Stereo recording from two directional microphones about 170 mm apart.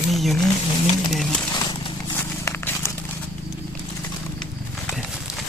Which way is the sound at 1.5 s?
25° left (ahead or behind).